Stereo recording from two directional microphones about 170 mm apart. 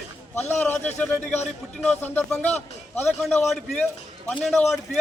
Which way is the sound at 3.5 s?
5° left (ahead or behind).